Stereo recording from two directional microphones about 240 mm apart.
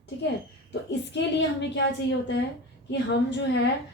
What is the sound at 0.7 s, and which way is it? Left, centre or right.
Speech, left.